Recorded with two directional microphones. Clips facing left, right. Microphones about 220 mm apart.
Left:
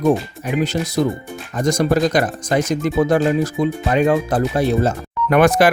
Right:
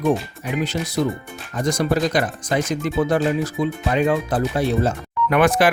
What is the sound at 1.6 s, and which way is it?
Speech, 45° left (ahead or behind).